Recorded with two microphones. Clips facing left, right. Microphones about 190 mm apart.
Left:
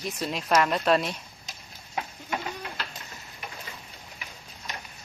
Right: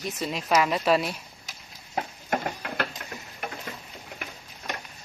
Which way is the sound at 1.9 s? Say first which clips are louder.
Right 4 dB; 55° right (ahead or behind).